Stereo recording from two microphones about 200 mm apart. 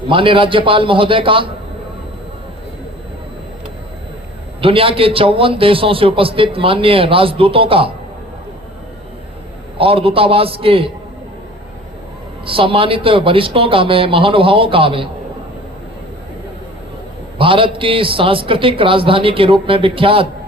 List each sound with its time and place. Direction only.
0.1 s a man's voice: 25° right (ahead or behind)
4.6 s a man's voice: 25° right (ahead or behind)
9.7 s a man's voice: 30° right (ahead or behind)
12.5 s a man's voice: 25° right (ahead or behind)
17.3 s a man's voice: 25° right (ahead or behind)